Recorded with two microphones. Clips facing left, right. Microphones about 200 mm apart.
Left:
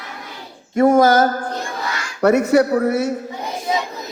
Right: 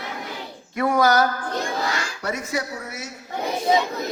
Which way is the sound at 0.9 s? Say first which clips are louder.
Left 4 dB; 45° left (ahead or behind).